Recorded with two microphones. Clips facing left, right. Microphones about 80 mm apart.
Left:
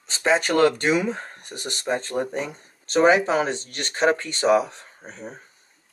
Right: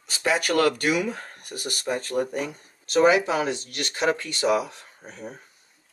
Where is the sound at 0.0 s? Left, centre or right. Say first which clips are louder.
Left 3 dB; left.